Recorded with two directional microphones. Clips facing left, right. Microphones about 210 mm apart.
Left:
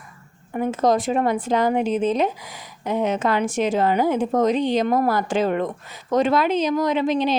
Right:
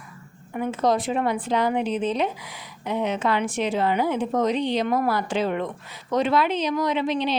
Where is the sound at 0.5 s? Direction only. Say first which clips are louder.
Left 3 dB; 45° left (ahead or behind).